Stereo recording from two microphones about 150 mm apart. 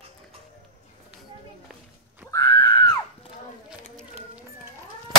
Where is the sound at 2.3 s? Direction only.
25° left (ahead or behind).